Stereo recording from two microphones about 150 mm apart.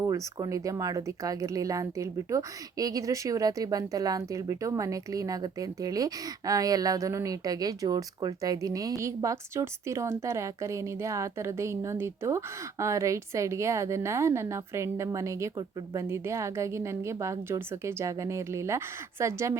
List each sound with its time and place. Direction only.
0.0 s speech: 25° right (ahead or behind)